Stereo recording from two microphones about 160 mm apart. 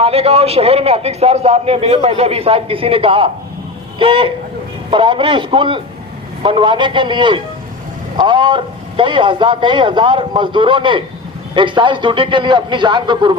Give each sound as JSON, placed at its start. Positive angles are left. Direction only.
{"t": 0.0, "sound": "a man's voice", "side_deg": -40}